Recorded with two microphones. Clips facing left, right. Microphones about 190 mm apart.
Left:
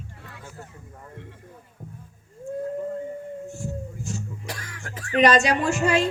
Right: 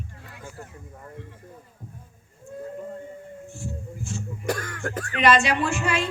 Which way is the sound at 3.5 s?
40° left (ahead or behind).